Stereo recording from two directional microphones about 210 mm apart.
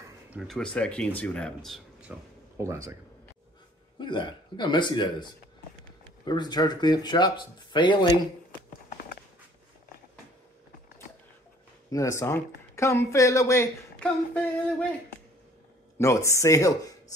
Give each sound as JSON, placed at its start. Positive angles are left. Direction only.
{"t": 0.3, "sound": "speech", "side_deg": 0}
{"t": 4.0, "sound": "speech", "side_deg": 20}
{"t": 11.9, "sound": "speech", "side_deg": 15}
{"t": 16.0, "sound": "speech", "side_deg": 15}